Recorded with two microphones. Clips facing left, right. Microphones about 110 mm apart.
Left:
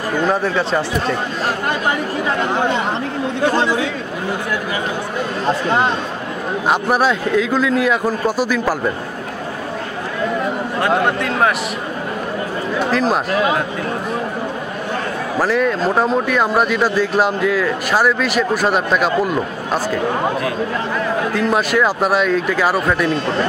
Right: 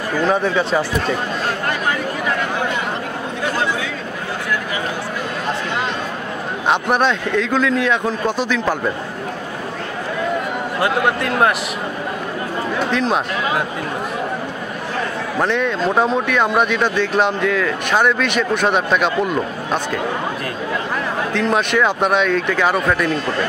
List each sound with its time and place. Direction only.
0.2 s speech: centre (ahead or behind)
5.7 s speech: 35° left (ahead or behind)
6.7 s speech: 5° left (ahead or behind)
10.8 s speech: centre (ahead or behind)
12.9 s speech: 5° left (ahead or behind)
15.3 s speech: 5° left (ahead or behind)
21.3 s speech: 5° left (ahead or behind)